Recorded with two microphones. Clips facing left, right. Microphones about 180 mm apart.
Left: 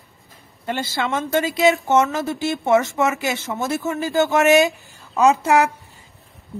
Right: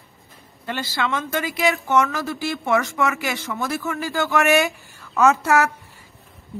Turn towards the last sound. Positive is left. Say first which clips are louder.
# left 2 dB
turn(degrees=15)  # may be behind; listen again after turning